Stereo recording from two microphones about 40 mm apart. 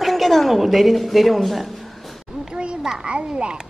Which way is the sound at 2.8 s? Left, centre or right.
Right.